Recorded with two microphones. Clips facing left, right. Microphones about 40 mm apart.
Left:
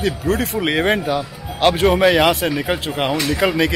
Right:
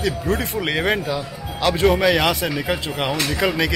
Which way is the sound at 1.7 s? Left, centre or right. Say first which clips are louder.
Left 1 dB; centre.